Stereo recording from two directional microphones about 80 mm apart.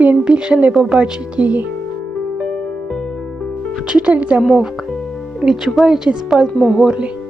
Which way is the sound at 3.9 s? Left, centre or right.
Centre.